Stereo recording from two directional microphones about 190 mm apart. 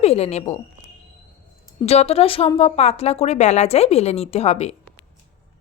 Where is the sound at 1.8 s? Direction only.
35° left (ahead or behind).